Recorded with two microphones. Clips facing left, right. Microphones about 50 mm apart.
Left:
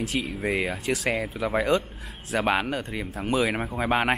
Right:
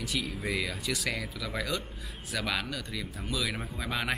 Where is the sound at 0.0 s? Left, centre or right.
Left.